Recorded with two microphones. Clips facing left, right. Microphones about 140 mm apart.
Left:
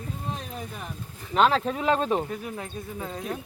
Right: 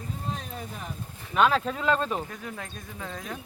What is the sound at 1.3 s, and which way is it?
Speech, 30° left (ahead or behind).